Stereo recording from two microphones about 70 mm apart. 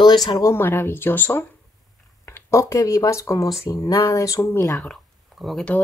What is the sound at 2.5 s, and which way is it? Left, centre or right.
Speech, left.